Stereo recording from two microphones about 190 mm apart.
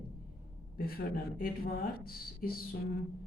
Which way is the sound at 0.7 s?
50° left (ahead or behind).